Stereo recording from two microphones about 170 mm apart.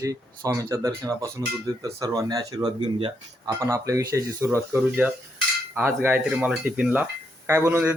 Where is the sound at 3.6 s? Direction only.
20° right (ahead or behind).